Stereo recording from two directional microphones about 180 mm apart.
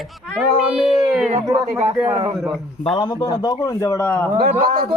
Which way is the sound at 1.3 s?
20° right (ahead or behind).